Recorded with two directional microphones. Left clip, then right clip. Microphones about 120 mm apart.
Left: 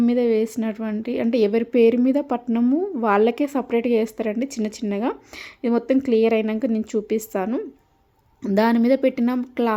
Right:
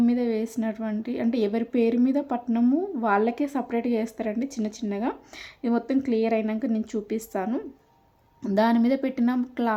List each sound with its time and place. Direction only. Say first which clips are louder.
0.0 s a woman's voice: left 6 dB; 30° left (ahead or behind)